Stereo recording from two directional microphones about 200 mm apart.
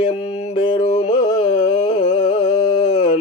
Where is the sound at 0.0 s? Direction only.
25° left (ahead or behind).